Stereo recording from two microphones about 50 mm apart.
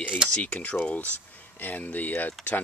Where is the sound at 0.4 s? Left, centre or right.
Left.